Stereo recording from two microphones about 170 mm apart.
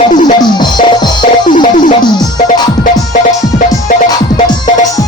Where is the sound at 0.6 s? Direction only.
25° left (ahead or behind).